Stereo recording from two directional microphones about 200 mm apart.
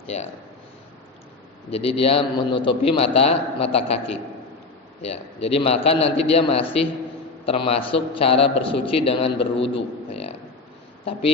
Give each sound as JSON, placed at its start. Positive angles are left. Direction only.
{"t": 1.7, "sound": "a man's voice", "side_deg": 30}